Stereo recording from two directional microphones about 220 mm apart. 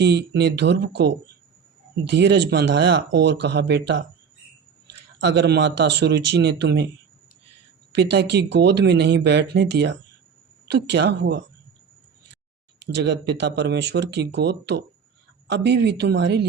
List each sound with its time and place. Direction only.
0.0 s speech: 50° right (ahead or behind)
5.2 s speech: 50° right (ahead or behind)
7.9 s speech: 50° right (ahead or behind)
12.8 s speech: 50° right (ahead or behind)